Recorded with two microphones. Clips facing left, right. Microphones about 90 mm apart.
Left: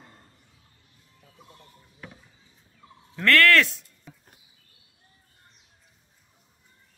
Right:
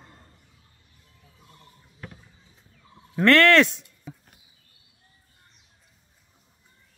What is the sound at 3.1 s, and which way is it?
Speech, 25° right (ahead or behind).